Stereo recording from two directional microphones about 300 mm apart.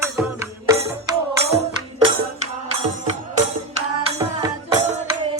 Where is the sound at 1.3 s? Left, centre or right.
Centre.